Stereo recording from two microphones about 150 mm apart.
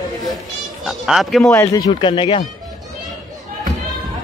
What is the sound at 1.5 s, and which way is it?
Speech, 20° left (ahead or behind).